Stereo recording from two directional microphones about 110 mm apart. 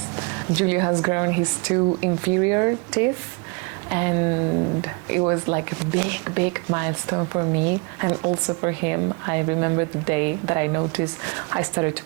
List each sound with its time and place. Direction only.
0.2 s a sound: 20° right (ahead or behind)
1.0 s speech: 25° right (ahead or behind)
3.8 s speech: 20° right (ahead or behind)